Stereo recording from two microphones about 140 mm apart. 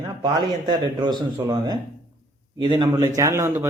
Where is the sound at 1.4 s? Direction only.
25° right (ahead or behind).